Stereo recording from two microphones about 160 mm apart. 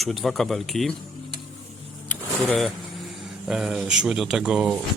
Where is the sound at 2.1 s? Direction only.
10° left (ahead or behind).